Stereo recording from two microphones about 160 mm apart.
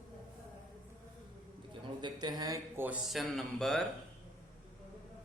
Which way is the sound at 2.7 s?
10° right (ahead or behind).